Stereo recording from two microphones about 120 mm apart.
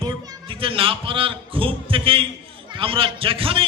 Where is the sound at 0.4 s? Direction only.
50° right (ahead or behind).